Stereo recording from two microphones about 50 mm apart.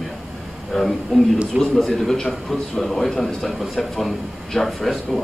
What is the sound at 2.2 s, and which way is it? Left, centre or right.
Speech, left.